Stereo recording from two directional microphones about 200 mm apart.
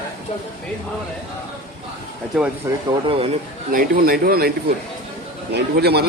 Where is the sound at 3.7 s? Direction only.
45° right (ahead or behind).